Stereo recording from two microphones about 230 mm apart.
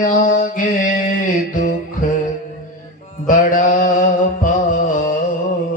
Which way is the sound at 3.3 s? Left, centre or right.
Left.